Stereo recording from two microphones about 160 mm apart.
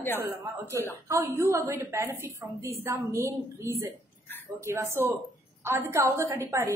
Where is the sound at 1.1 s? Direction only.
15° right (ahead or behind).